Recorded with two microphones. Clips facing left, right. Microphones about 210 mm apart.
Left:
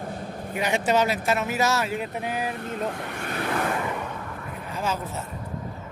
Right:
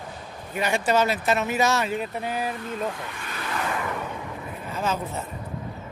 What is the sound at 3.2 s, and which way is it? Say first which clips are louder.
Vehicle: left 8 dB; 60° left (ahead or behind).